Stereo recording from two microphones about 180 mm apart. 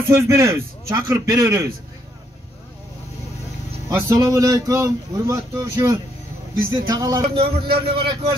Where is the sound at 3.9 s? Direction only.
15° right (ahead or behind).